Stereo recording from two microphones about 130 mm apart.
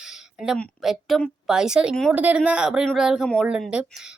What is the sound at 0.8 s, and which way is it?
A woman's voice, centre (ahead or behind).